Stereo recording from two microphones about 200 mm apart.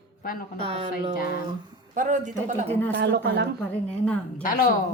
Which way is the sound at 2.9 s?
55° right (ahead or behind).